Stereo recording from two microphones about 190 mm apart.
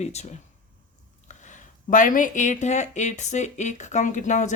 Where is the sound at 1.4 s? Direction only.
40° left (ahead or behind).